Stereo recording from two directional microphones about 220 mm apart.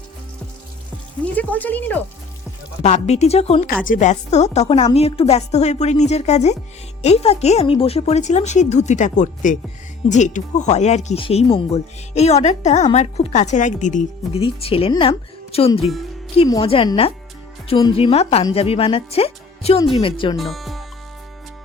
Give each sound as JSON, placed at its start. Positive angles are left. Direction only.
{"t": 1.2, "sound": "speech", "side_deg": 5}
{"t": 2.8, "sound": "speech", "side_deg": 30}
{"t": 20.3, "sound": "speech", "side_deg": 0}